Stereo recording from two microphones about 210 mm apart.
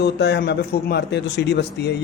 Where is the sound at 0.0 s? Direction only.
50° left (ahead or behind).